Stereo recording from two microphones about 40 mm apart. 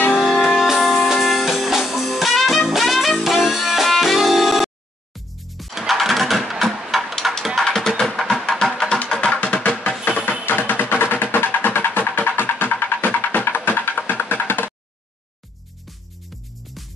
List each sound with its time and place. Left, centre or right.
0.2 s music: centre
5.8 s vehicle: centre
6.6 s a sound: centre
7.6 s music: centre
8.7 s music: centre
9.2 s music: left
10.7 s music: left
12.1 s music: left
14.3 s a sound: left